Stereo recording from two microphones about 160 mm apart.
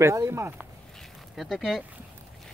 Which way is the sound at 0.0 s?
20° right (ahead or behind).